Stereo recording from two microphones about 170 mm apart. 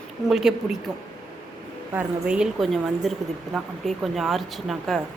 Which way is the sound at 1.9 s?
5° right (ahead or behind).